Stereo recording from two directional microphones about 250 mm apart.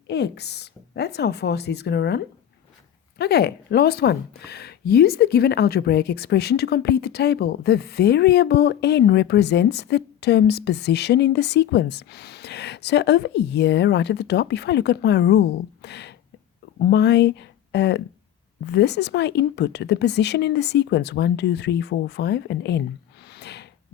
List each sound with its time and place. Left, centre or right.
0.1 s speech: left
23.2 s snort: left